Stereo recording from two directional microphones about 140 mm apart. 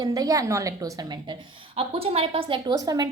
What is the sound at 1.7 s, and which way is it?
A woman's voice, 45° right (ahead or behind).